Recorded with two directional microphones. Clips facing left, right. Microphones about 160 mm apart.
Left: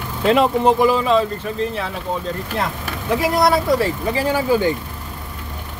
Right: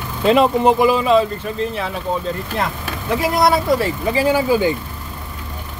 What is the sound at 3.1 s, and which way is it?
Speech, centre (ahead or behind).